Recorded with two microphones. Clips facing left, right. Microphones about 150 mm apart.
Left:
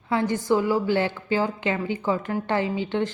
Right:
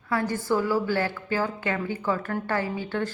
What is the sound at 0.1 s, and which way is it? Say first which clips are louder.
A woman's voice: left 3 dB; 20° left (ahead or behind).